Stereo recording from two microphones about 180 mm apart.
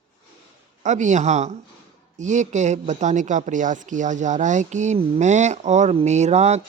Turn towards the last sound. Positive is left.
turn(degrees=-40)  # may be behind; listen again after turning